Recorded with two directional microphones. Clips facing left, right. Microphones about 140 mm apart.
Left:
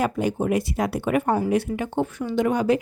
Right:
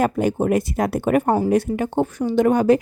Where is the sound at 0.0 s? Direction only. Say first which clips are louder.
Right 4 dB; 50° right (ahead or behind).